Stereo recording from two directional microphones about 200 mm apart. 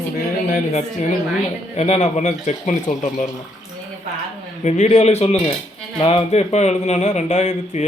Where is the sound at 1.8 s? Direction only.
35° left (ahead or behind).